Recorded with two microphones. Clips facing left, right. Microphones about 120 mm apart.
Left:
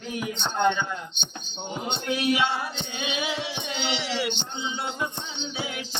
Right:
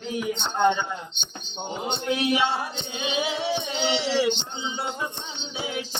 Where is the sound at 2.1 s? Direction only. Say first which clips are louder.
Right 1 dB; 25° right (ahead or behind).